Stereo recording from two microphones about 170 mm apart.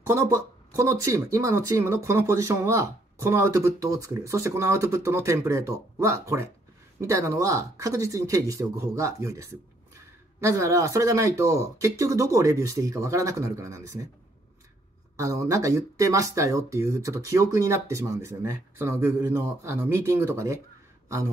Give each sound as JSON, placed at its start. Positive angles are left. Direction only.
{"t": 0.0, "sound": "speech", "side_deg": -15}
{"t": 15.1, "sound": "speech", "side_deg": -20}